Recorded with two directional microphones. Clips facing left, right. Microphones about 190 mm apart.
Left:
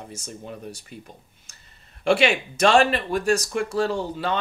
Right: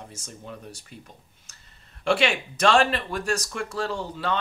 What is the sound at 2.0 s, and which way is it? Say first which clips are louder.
Speech: left 3 dB; 15° left (ahead or behind).